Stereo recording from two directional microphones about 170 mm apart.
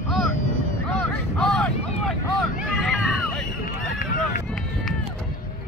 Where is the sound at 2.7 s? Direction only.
Centre (ahead or behind).